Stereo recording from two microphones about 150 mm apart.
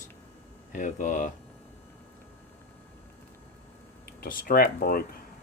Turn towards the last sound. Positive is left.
turn(degrees=80)